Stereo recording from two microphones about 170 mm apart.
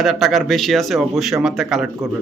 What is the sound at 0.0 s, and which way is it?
A man's voice, centre (ahead or behind).